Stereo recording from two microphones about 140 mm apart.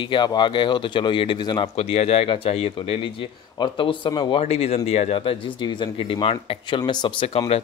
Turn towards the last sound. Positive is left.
turn(degrees=40)  # may be behind; listen again after turning